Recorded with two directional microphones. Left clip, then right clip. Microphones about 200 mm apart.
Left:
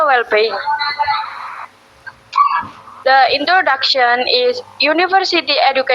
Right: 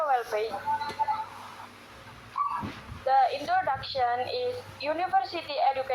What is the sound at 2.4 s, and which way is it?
Dog, 50° left (ahead or behind).